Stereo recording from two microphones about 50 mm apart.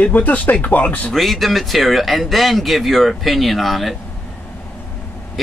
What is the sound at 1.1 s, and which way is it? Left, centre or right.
Speech, centre.